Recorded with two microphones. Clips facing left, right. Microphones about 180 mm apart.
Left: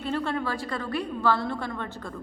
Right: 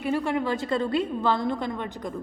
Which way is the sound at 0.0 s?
10° right (ahead or behind).